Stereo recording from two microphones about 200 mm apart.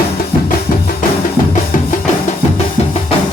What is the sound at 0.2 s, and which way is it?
Music, 45° left (ahead or behind).